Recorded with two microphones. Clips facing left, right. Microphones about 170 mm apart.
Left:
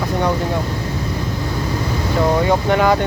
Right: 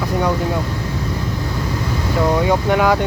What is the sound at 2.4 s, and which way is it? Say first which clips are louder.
Speech: even; 5° right (ahead or behind).